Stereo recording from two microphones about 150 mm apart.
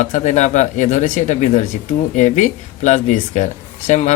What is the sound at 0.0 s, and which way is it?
Speech, 55° left (ahead or behind).